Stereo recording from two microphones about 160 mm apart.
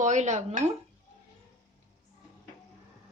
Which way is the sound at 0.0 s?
50° right (ahead or behind).